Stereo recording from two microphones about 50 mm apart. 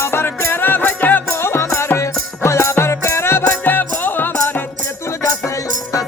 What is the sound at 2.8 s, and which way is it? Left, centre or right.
Music, left.